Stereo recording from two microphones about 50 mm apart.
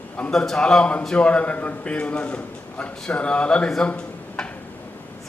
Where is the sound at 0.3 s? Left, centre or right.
Centre.